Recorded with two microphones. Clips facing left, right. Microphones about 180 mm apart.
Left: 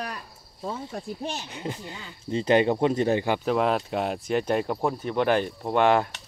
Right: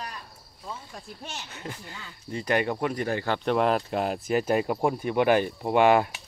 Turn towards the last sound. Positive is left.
turn(degrees=-10)  # may be behind; listen again after turning